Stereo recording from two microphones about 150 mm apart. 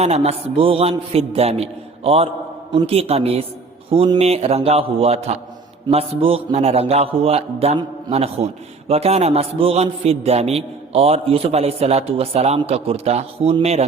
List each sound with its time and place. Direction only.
0.0 s a man's voice: 45° right (ahead or behind)